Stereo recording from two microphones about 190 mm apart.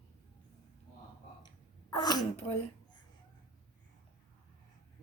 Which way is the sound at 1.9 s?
20° left (ahead or behind).